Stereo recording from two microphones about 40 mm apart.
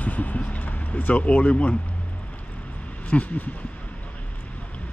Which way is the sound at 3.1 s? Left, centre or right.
Left.